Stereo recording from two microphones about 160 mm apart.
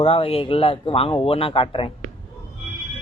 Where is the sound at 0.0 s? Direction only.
35° left (ahead or behind).